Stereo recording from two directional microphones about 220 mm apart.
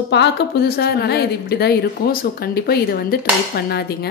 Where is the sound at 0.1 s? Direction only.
50° left (ahead or behind).